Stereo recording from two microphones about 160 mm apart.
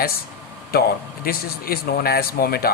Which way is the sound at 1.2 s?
70° left (ahead or behind).